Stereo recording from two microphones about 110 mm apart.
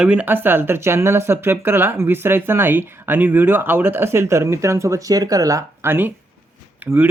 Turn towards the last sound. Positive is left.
turn(degrees=-20)  # may be behind; listen again after turning